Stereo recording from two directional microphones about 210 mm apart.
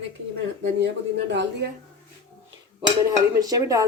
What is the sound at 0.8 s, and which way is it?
Speech, 60° right (ahead or behind).